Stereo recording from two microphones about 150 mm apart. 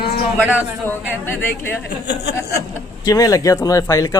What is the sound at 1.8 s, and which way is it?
Speech, 90° left.